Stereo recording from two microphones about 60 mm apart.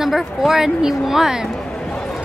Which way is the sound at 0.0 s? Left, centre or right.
Centre.